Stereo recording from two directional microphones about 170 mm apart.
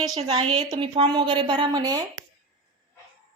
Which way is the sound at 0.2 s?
30° right (ahead or behind).